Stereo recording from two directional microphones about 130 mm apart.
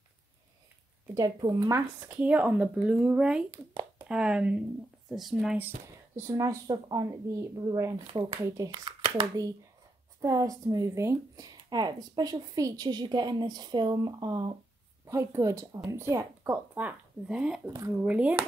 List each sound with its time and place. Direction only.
1.1 s speech: 30° right (ahead or behind); by 5.7 s 5° right (ahead or behind)
6.1 s speech: 20° right (ahead or behind)
8.1 s speech: 40° right (ahead or behind)
8.4 s speech: 20° right (ahead or behind)
15.0 s speech: 20° right (ahead or behind)
16.7 s speech: 10° right (ahead or behind)